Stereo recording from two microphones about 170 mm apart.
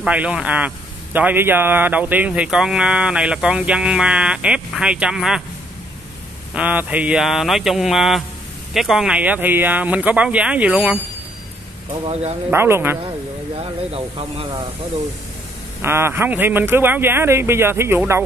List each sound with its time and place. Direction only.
0.0 s speech: 5° right (ahead or behind)
6.5 s speech: 10° right (ahead or behind)
12.1 s speech: 40° right (ahead or behind)
12.4 s speech: 15° right (ahead or behind)
13.6 s speech: 35° right (ahead or behind)
15.8 s speech: 15° right (ahead or behind)